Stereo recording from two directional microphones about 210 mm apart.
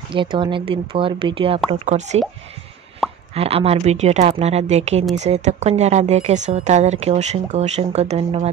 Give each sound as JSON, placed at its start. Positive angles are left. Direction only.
{"t": 0.1, "sound": "speech", "side_deg": -20}
{"t": 3.0, "sound": "plop", "side_deg": 0}
{"t": 3.3, "sound": "speech", "side_deg": -30}